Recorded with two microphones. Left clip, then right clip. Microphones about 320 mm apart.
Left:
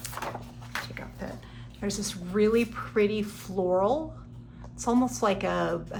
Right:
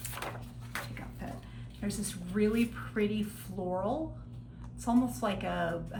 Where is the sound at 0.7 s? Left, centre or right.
Left.